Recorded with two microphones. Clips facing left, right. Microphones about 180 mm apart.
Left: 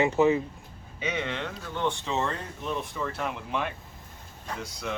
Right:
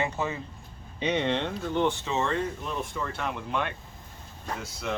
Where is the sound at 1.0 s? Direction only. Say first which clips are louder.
Right 5 dB; 35° right (ahead or behind).